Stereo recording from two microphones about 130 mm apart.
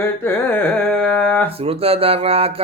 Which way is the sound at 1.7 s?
45° right (ahead or behind).